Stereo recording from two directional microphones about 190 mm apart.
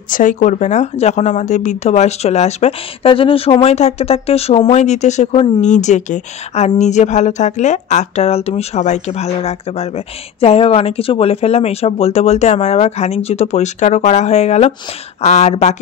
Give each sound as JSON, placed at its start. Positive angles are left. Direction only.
{"t": 0.1, "sound": "a woman's voice", "side_deg": 45}